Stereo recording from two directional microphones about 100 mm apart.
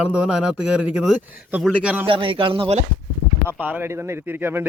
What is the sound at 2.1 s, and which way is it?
Speech, 60° right (ahead or behind).